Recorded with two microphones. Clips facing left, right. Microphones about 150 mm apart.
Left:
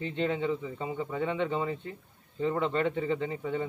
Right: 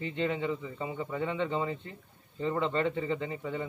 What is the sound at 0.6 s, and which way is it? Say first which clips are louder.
Speech: left 2 dB; 15° left (ahead or behind).